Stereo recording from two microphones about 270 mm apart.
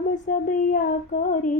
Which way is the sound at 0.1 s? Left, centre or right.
Left.